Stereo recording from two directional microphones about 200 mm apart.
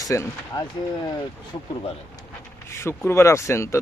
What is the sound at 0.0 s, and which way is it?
Speech, 15° left (ahead or behind).